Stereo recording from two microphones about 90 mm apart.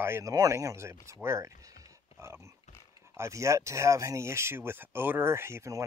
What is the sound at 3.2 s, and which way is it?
Speech, 35° right (ahead or behind).